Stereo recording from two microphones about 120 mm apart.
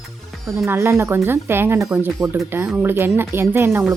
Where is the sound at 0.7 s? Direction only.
20° right (ahead or behind).